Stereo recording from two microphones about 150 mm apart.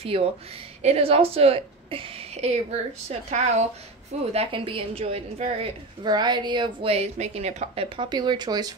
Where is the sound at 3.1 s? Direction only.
50° right (ahead or behind).